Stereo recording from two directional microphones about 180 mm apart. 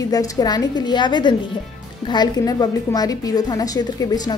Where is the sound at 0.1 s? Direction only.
20° left (ahead or behind).